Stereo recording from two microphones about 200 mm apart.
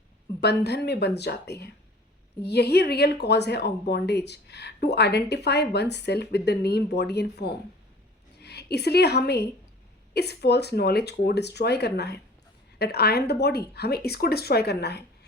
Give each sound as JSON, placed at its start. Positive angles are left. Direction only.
{"t": 0.4, "sound": "a woman's voice", "side_deg": 55}